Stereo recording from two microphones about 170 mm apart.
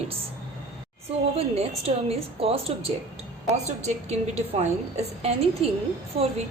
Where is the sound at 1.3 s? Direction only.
35° right (ahead or behind).